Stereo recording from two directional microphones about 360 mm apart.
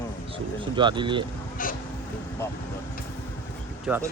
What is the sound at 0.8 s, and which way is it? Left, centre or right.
Speech, centre.